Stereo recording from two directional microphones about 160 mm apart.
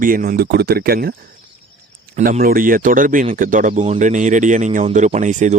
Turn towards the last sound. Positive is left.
turn(degrees=-50)  # may be behind; listen again after turning